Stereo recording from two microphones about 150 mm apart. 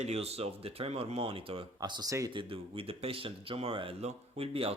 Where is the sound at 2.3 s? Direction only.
40° right (ahead or behind).